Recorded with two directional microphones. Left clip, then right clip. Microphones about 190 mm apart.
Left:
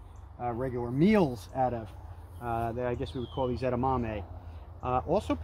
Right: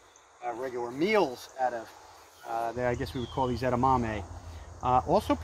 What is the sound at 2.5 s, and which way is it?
Speech, 35° right (ahead or behind).